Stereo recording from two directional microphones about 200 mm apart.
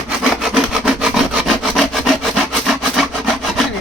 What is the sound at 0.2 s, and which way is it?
Sawing, 5° right (ahead or behind).